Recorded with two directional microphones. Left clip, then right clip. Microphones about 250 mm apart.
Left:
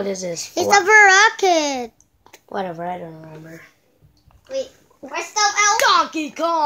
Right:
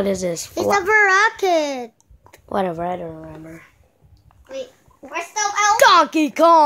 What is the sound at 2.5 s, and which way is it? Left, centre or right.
Speech, right.